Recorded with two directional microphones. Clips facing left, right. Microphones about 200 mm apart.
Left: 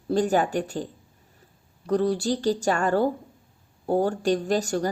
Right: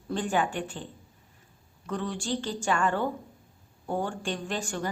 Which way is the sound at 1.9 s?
40° left (ahead or behind).